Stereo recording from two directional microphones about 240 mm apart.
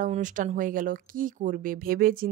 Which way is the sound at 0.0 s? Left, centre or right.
Right.